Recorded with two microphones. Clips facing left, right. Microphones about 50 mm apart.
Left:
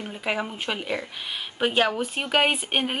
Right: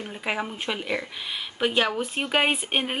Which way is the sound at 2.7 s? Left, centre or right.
Centre.